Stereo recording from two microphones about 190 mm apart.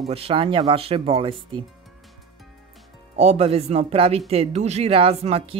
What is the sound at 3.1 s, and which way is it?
Speech, 35° right (ahead or behind).